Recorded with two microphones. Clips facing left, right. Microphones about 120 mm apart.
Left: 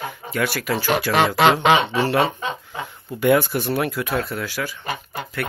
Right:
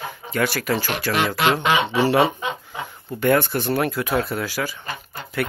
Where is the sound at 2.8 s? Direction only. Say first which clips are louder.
Left 2 dB; centre (ahead or behind).